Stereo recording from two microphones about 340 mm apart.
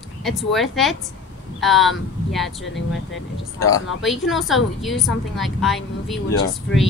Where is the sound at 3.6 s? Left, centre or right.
Left.